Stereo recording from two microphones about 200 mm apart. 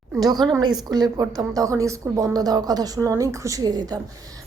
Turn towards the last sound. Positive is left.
turn(degrees=-20)  # may be behind; listen again after turning